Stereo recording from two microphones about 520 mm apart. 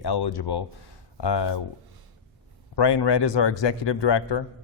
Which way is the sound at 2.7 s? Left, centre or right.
Left.